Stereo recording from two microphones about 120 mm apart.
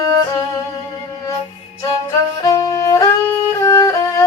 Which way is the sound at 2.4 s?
30° left (ahead or behind).